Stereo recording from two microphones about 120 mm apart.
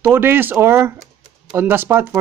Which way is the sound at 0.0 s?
20° right (ahead or behind).